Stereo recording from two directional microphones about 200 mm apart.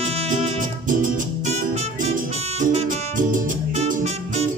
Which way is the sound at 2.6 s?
40° right (ahead or behind).